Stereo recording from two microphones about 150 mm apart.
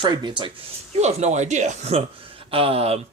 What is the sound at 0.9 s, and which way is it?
A man's voice, 50° right (ahead or behind).